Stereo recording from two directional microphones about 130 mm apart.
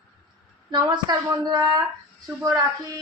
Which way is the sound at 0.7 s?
35° right (ahead or behind).